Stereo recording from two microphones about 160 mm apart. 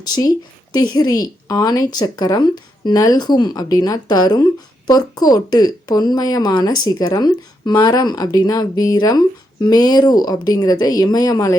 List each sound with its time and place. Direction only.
0.1 s a woman's voice: 25° left (ahead or behind)